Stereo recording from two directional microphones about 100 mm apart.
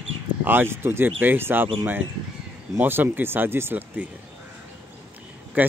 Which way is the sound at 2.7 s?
20° right (ahead or behind).